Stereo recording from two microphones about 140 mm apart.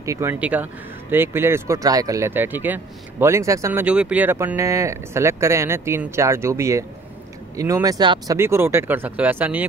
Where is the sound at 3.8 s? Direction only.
10° right (ahead or behind).